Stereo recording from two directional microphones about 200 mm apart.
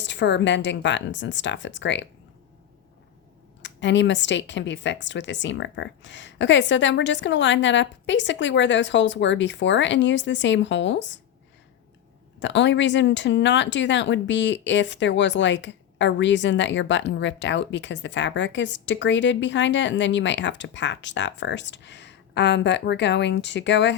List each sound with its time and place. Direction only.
0.0 s speech: 60° left (ahead or behind)
3.6 s speech: 65° left (ahead or behind)
12.4 s speech: 65° left (ahead or behind)